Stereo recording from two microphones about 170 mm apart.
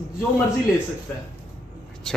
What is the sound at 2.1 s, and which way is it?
Vehicle, 5° left (ahead or behind).